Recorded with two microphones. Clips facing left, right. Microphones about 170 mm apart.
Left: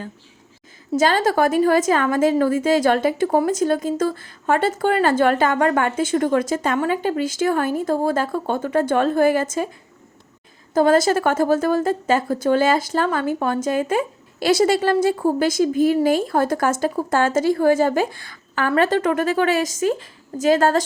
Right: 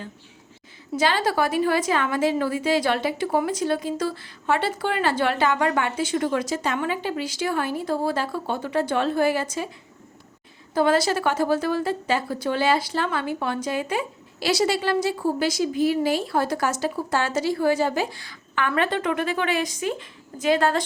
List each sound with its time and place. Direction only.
0.9 s a woman's voice: 45° left (ahead or behind)
10.8 s a woman's voice: 45° left (ahead or behind)